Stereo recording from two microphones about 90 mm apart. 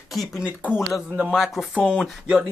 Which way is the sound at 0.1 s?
Centre (ahead or behind).